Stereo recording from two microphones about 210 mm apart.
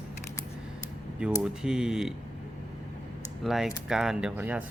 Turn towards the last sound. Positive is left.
turn(degrees=-5)  # may be behind; listen again after turning